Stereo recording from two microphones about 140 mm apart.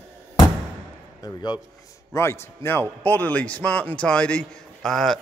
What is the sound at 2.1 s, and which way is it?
A man's voice, 20° left (ahead or behind).